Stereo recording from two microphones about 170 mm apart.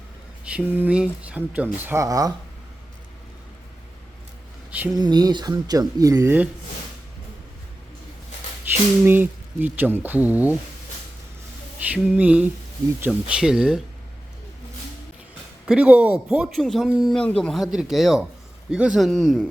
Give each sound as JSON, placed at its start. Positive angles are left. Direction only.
{"t": 0.5, "sound": "speech", "side_deg": -10}
{"t": 4.9, "sound": "speech", "side_deg": -25}
{"t": 8.7, "sound": "speech", "side_deg": -10}
{"t": 11.9, "sound": "speech", "side_deg": -5}
{"t": 15.6, "sound": "speech", "side_deg": -5}